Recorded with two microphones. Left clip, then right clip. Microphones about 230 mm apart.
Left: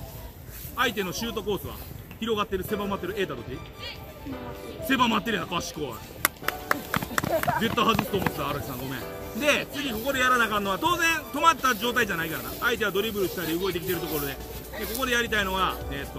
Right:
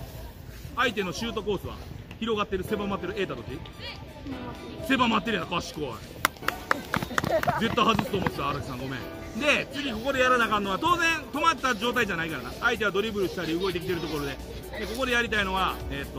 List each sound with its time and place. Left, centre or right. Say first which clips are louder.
0.7 s a man's voice: even; centre
4.8 s a man's voice: left 1 dB; centre